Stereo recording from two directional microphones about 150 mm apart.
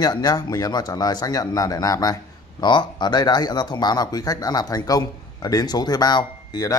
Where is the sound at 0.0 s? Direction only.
25° left (ahead or behind).